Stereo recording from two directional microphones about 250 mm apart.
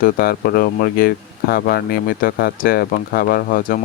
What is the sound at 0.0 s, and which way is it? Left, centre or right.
Speech, left.